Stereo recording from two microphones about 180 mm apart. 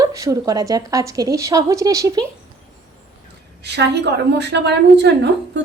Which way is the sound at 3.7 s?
70° right (ahead or behind).